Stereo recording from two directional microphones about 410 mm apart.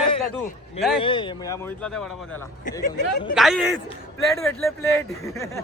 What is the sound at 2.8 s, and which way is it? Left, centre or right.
Speech, centre.